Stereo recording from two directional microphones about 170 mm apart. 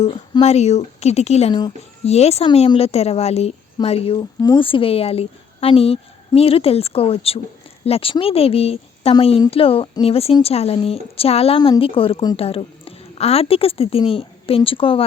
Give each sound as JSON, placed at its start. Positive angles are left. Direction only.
{"t": 0.0, "sound": "speech", "side_deg": 40}
{"t": 4.4, "sound": "a woman's voice", "side_deg": 25}